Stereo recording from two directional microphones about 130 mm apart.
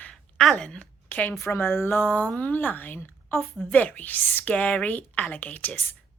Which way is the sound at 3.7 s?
10° left (ahead or behind).